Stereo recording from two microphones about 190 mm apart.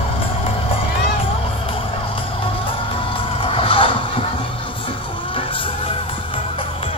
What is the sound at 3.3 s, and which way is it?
Neigh, 30° left (ahead or behind).